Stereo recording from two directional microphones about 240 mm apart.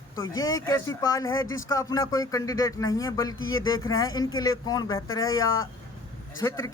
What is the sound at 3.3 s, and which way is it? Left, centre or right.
Speech, left.